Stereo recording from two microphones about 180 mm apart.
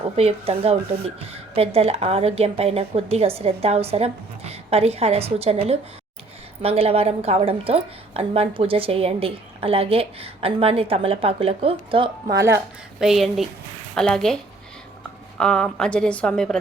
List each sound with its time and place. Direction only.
0.2 s a woman's voice: 35° right (ahead or behind)
13.0 s a woman's voice: centre (ahead or behind)
15.4 s a woman's voice: 5° left (ahead or behind)